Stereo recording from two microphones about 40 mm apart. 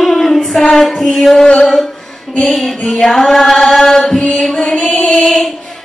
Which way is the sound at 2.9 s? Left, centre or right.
Centre.